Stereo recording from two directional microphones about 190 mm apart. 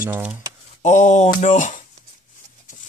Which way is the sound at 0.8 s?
40° left (ahead or behind).